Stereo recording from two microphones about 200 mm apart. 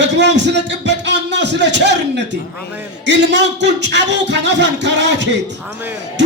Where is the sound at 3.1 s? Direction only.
60° right (ahead or behind).